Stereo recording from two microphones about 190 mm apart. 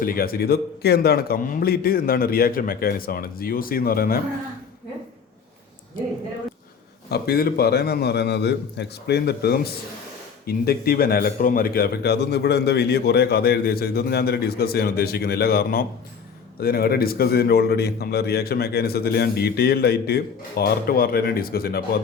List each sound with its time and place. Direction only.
0.0 s a man's voice: 50° left (ahead or behind)
7.1 s a man's voice: 55° left (ahead or behind)